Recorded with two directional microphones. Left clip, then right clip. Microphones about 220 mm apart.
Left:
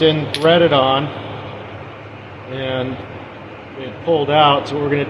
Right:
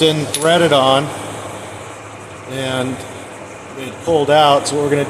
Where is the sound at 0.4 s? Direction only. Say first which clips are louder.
Right 1 dB; 20° right (ahead or behind).